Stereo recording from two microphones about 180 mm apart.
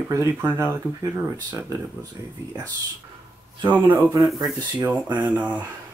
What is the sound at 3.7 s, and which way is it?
Speech, 10° right (ahead or behind).